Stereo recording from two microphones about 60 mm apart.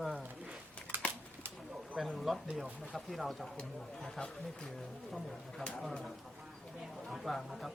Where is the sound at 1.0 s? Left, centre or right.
Left.